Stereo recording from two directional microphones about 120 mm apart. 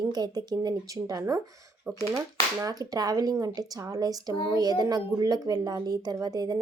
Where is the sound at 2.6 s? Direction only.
30° right (ahead or behind).